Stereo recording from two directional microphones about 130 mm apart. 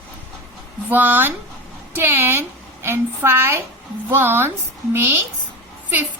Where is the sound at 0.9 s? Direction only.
15° right (ahead or behind).